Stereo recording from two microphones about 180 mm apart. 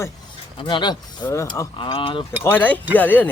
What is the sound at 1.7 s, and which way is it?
Speech, 30° left (ahead or behind).